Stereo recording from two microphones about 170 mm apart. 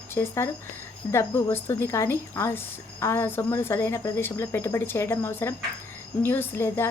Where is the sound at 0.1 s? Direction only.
15° left (ahead or behind).